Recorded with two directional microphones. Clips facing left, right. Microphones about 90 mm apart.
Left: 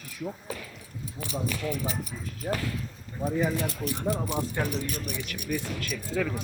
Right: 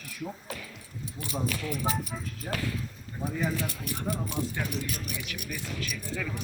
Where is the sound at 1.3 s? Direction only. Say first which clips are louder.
Left 1 dB; 10° right (ahead or behind).